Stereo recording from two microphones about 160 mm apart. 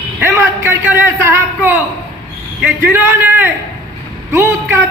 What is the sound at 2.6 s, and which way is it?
A man's voice, 10° right (ahead or behind).